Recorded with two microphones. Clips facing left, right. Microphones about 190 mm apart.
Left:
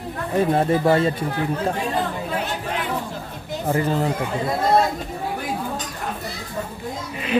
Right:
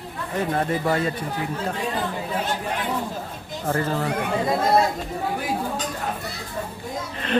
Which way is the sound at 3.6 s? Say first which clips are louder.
Left 3 dB; 15° left (ahead or behind).